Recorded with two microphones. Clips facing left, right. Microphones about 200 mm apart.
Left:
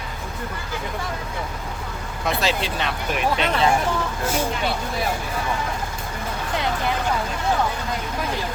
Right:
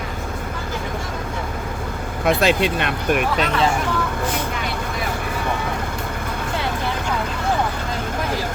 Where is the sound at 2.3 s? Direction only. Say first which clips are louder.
Right 6 dB; 55° right (ahead or behind).